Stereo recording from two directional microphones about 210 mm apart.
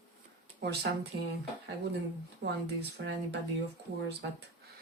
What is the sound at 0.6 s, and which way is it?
Speech, 50° right (ahead or behind).